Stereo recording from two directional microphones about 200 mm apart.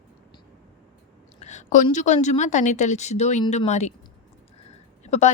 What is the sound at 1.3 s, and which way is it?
Speech, 35° left (ahead or behind).